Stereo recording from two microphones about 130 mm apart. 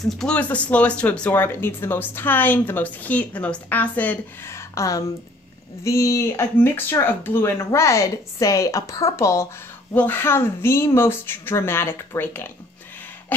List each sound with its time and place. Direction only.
0.0 s speech: 5° left (ahead or behind)